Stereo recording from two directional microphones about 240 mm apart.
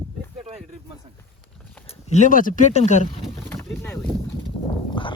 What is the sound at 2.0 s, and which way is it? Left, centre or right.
Speech, left.